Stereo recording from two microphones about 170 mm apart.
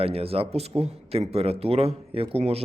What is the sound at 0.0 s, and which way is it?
Speech, 35° right (ahead or behind).